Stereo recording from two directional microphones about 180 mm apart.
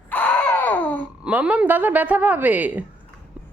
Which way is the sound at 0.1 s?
10° left (ahead or behind).